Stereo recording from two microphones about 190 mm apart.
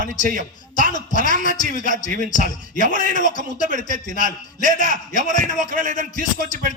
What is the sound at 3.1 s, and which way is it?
Speech, 45° left (ahead or behind).